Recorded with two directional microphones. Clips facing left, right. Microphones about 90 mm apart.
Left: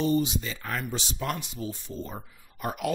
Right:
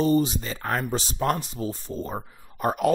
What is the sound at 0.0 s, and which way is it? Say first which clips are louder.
Speech: right 4 dB; 40° right (ahead or behind).